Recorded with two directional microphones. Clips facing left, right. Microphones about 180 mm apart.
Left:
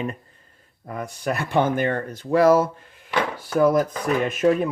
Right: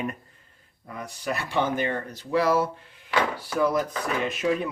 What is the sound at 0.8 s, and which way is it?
Speech, 50° left (ahead or behind).